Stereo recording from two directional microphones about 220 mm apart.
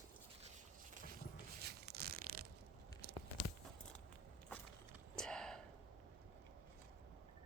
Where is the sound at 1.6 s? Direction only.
45° right (ahead or behind).